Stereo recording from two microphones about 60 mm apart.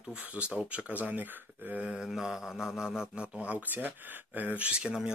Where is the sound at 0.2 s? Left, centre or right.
Right.